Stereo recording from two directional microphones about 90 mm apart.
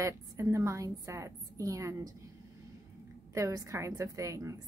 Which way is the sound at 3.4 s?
35° right (ahead or behind).